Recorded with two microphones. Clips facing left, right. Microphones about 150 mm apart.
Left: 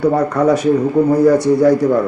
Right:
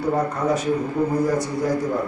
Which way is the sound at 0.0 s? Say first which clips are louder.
Left 8 dB; 75° left (ahead or behind).